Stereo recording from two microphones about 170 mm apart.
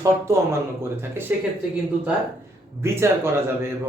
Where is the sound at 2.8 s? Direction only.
15° right (ahead or behind).